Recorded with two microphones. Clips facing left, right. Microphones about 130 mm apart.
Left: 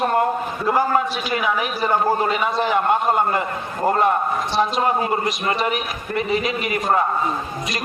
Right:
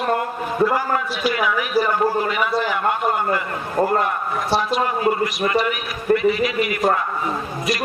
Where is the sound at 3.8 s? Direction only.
55° right (ahead or behind).